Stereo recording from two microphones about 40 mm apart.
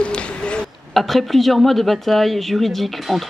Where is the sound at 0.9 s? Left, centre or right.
Centre.